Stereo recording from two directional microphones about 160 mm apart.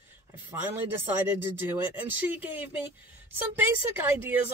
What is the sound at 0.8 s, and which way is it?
A woman's voice, 15° right (ahead or behind).